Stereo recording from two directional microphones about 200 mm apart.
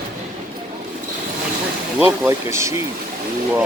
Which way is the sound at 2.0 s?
10° right (ahead or behind).